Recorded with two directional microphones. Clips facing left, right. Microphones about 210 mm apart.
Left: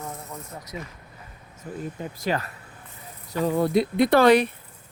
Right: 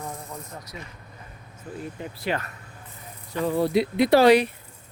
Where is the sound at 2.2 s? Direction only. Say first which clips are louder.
Left 2 dB; 40° left (ahead or behind).